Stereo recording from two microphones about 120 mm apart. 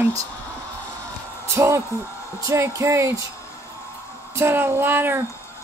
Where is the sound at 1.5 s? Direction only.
20° right (ahead or behind).